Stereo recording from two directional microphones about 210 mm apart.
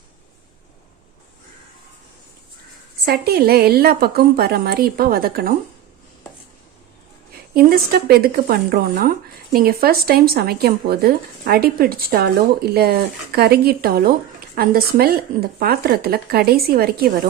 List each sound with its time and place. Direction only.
3.0 s speech: 50° right (ahead or behind)
7.5 s speech: 45° right (ahead or behind)